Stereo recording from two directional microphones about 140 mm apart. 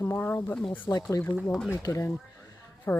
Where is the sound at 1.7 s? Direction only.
20° left (ahead or behind).